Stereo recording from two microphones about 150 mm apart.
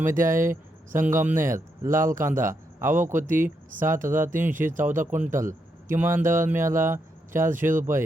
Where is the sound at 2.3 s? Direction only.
60° right (ahead or behind).